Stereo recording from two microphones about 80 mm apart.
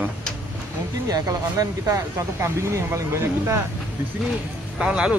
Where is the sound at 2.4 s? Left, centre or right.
Right.